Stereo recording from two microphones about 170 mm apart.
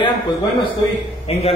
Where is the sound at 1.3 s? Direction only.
35° left (ahead or behind).